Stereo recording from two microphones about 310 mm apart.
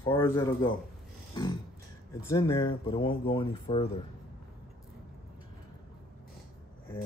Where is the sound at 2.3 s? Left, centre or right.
Centre.